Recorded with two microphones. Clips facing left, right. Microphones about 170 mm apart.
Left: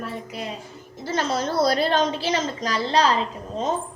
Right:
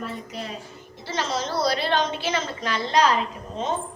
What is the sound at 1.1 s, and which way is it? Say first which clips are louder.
A woman's voice: left 3 dB; 55° left (ahead or behind).